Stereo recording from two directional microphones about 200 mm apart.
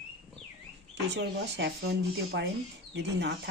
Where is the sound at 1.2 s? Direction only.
60° right (ahead or behind).